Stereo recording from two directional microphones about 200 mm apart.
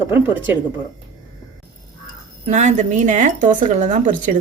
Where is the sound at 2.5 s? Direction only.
35° right (ahead or behind).